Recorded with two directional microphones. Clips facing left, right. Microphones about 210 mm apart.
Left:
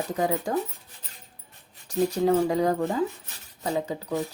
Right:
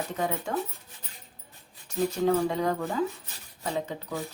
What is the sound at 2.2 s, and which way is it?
Speech, 35° left (ahead or behind).